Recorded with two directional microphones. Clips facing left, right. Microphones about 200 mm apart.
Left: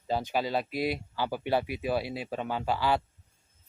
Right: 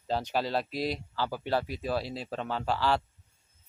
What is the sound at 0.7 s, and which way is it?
Speech, 55° left (ahead or behind).